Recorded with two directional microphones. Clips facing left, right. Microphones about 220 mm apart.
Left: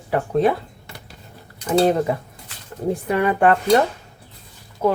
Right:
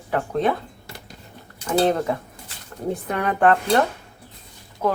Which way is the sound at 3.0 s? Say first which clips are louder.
Left 2 dB; 5° left (ahead or behind).